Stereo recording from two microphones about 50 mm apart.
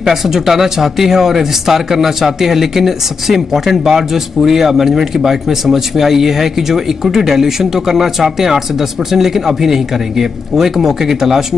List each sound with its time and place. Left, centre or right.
0.0 s speech: centre